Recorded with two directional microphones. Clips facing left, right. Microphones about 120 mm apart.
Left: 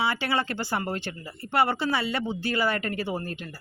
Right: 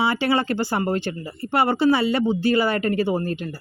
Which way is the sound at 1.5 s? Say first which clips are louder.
Right 6 dB; 15° right (ahead or behind).